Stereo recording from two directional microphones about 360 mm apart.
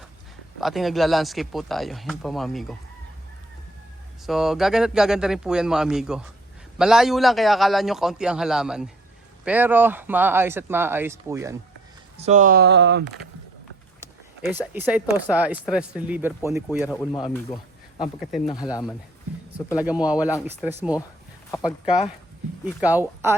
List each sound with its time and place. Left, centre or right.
0.6 s speech: centre
4.3 s speech: centre
12.1 s speech: centre
14.0 s speech: centre
17.0 s speech: centre
19.5 s speech: centre
22.6 s speech: centre